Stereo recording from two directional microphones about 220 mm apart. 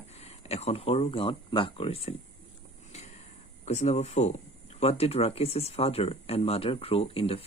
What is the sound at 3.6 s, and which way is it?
Speech, 30° left (ahead or behind).